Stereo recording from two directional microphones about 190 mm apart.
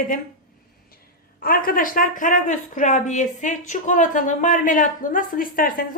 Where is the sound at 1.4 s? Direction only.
50° left (ahead or behind).